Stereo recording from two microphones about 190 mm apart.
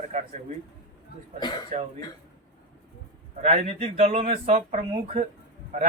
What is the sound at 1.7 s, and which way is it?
Speech, 40° right (ahead or behind).